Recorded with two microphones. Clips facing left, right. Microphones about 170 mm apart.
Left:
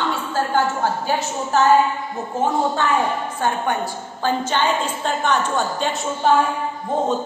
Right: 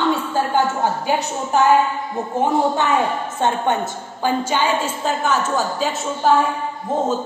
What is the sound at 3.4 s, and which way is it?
Speech, 25° right (ahead or behind).